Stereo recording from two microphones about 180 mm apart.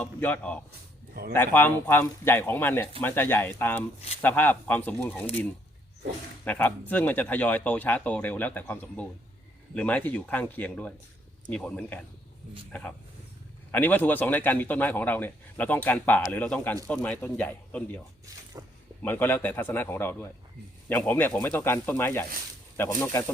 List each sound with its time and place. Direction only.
0.0 s a man's voice: 10° left (ahead or behind)
6.4 s a man's voice: 10° left (ahead or behind)
13.7 s a man's voice: 10° left (ahead or behind)
18.5 s speech: 20° right (ahead or behind)
19.0 s a man's voice: 10° left (ahead or behind)